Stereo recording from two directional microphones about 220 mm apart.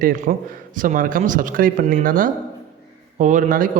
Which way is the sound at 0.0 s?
35° right (ahead or behind).